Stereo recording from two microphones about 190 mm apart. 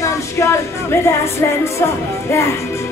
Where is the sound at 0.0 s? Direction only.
15° left (ahead or behind).